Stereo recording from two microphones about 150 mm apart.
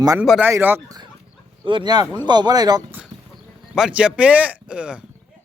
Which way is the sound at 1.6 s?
30° right (ahead or behind).